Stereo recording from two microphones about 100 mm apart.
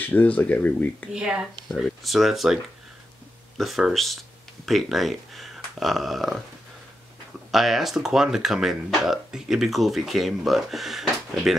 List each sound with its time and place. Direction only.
0.0 s speech: 15° left (ahead or behind)
1.1 s speech: 10° right (ahead or behind)
7.5 s speech: centre (ahead or behind)